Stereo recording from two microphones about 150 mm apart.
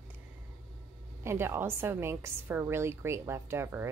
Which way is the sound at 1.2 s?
15° right (ahead or behind).